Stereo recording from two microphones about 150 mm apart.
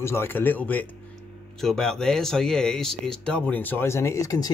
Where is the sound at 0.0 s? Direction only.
15° left (ahead or behind).